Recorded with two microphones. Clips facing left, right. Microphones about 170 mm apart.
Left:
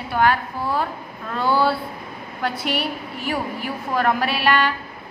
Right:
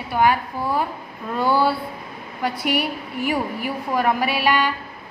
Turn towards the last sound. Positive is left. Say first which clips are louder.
# even
turn(degrees=-10)  # may be behind; listen again after turning